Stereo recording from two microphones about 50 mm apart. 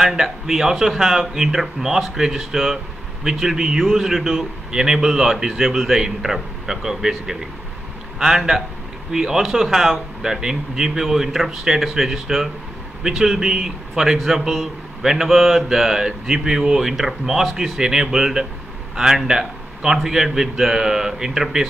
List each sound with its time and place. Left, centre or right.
0.0 s a man's voice: centre